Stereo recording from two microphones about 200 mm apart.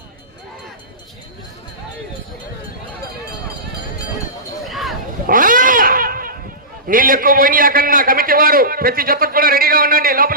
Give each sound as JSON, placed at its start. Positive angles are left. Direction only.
{"t": 4.6, "sound": "a sound", "side_deg": 0}
{"t": 5.2, "sound": "cat", "side_deg": -45}
{"t": 6.8, "sound": "a man's voice", "side_deg": -45}